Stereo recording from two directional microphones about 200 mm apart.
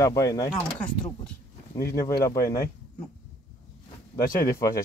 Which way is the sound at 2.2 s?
15° left (ahead or behind).